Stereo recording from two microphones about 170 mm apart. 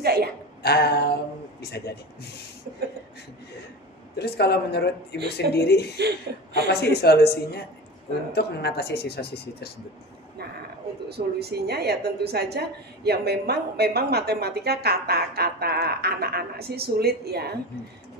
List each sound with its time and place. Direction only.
0.0 s a sound: 70° right (ahead or behind)
0.6 s a sound: 70° left (ahead or behind)
4.2 s speech: 70° left (ahead or behind)
5.9 s a woman's voice: 75° right (ahead or behind)
6.7 s speech: 75° left (ahead or behind)
11.1 s a woman's voice: 70° right (ahead or behind)